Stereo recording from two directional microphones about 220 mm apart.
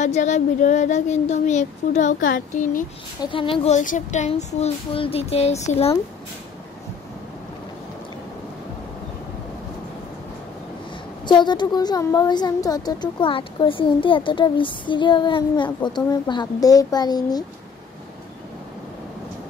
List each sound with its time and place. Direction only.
0.0 s speech: 30° left (ahead or behind)
3.3 s a woman's voice: 25° left (ahead or behind)
11.2 s a woman's voice: 20° left (ahead or behind)